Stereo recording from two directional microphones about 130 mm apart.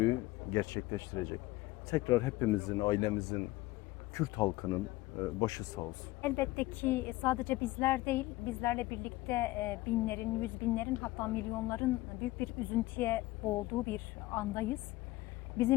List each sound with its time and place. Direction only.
0.0 s a woman's voice: 25° left (ahead or behind)